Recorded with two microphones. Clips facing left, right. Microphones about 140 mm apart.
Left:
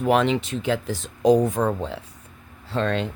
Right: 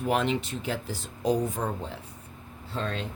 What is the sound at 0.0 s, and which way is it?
Speech, 90° left.